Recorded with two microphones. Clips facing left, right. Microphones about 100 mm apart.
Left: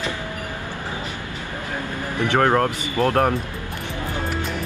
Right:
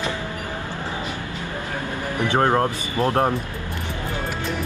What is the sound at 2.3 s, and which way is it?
Speech, 20° right (ahead or behind).